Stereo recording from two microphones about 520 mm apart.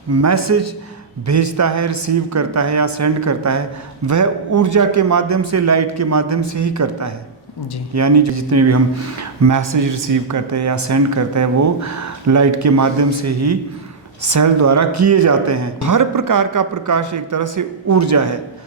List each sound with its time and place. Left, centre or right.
0.2 s speech: right